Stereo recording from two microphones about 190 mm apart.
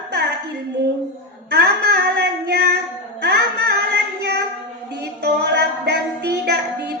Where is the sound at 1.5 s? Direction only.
60° right (ahead or behind).